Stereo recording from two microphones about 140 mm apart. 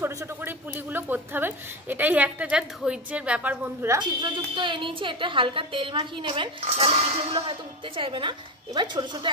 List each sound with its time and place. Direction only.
0.0 s a woman's voice: 15° right (ahead or behind)
4.0 s speech: 35° right (ahead or behind)